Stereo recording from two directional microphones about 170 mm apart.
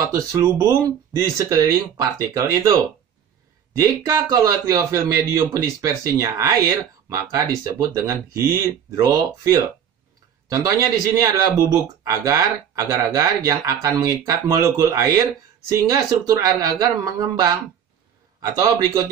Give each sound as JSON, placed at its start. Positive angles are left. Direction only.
{"t": 0.1, "sound": "a man's voice", "side_deg": -15}